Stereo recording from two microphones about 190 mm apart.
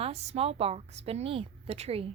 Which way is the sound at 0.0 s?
30° right (ahead or behind).